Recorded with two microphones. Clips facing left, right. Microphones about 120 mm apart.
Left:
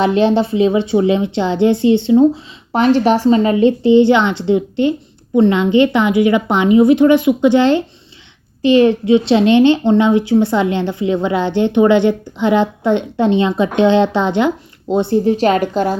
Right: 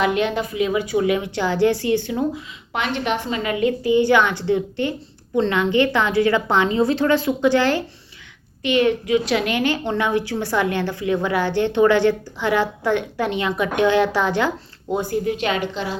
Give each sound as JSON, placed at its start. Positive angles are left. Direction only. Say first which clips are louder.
{"t": 0.0, "sound": "a woman's voice", "louder": "left 7 dB", "side_deg": 30}
{"t": 8.6, "sound": "a woman's voice", "louder": "left 8 dB", "side_deg": 30}